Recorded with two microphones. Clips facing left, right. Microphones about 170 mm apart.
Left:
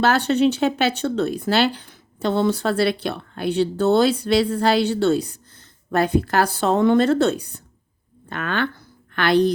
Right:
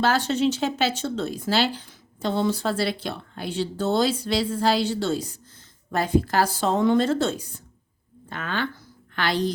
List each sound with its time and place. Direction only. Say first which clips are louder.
0.0 s speech: left 4 dB; 65° left (ahead or behind)